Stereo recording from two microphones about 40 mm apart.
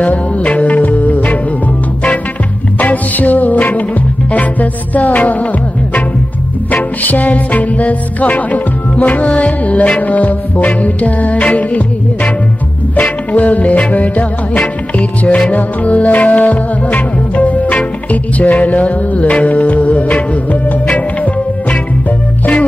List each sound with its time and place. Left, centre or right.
0.0 s music: left
2.8 s music: left
6.7 s music: left